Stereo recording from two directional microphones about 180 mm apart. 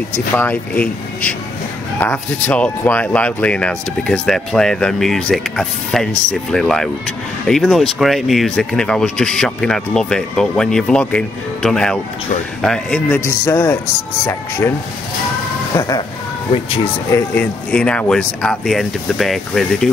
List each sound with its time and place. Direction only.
0.1 s speech: 10° left (ahead or behind)
15.7 s speech: 20° left (ahead or behind)
17.1 s speech: 10° left (ahead or behind)